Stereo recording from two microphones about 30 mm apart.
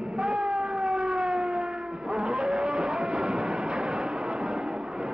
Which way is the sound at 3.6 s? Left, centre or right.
Centre.